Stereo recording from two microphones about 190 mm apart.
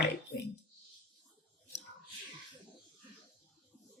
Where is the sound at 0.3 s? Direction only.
55° left (ahead or behind).